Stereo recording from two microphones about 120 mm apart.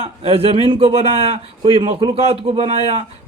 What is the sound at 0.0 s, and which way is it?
A man's voice, 55° right (ahead or behind).